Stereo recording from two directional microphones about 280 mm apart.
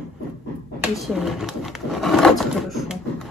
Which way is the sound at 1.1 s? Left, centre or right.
Centre.